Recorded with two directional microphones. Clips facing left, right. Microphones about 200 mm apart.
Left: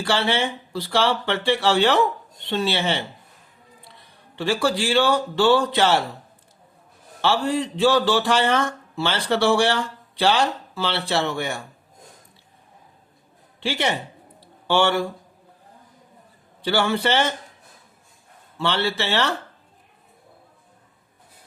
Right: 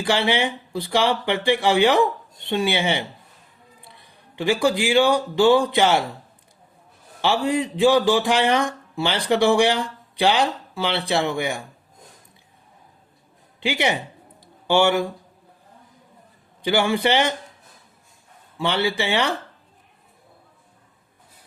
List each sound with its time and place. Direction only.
0.0 s speech: 15° right (ahead or behind)
4.4 s speech: 15° right (ahead or behind)
7.2 s speech: 15° right (ahead or behind)
13.6 s speech: 15° right (ahead or behind)
16.6 s speech: 15° right (ahead or behind)
18.5 s speech: 15° right (ahead or behind)